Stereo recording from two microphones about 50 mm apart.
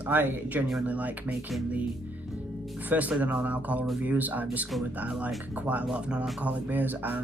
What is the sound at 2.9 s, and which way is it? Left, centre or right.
Speech, right.